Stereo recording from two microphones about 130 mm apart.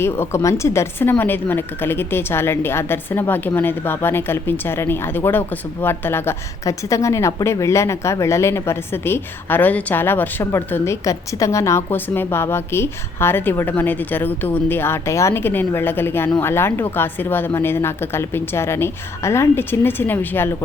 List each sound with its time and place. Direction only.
0.0 s a woman's voice: 20° left (ahead or behind)